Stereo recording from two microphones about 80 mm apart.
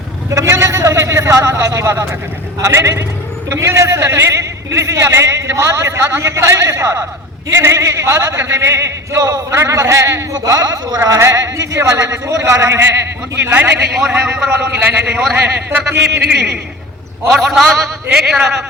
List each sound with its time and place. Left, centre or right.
0.3 s a sound: right
2.6 s a man's voice: right
10.3 s a man's voice: right
11.0 s a man's voice: right
13.9 s a man's voice: centre